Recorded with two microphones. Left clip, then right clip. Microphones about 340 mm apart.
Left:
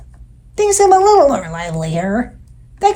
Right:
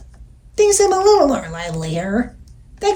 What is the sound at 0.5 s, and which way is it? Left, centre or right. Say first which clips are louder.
A child's voice: left 3 dB; centre.